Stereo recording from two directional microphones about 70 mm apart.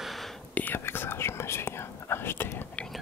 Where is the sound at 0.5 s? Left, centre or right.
Left.